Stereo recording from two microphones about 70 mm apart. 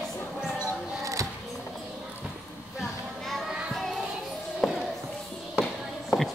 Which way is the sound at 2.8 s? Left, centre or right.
Centre.